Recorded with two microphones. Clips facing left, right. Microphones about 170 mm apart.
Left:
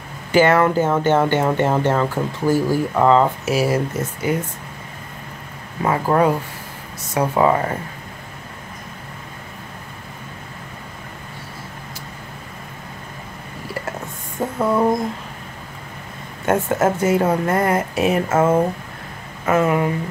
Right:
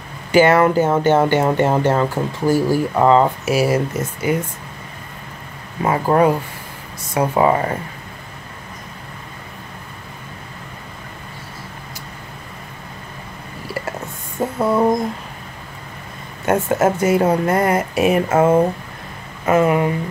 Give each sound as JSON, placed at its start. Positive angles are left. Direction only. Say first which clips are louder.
{"t": 0.3, "sound": "speech", "louder": "right 2 dB", "side_deg": -15}
{"t": 5.9, "sound": "speech", "louder": "right 2 dB", "side_deg": -15}
{"t": 14.6, "sound": "a sound", "louder": "right 1 dB", "side_deg": -10}
{"t": 16.4, "sound": "speech", "louder": "right 1 dB", "side_deg": -15}